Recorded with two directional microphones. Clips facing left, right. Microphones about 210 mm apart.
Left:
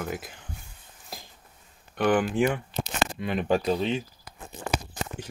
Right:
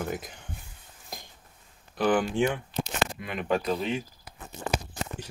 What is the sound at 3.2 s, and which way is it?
Speech, 30° left (ahead or behind).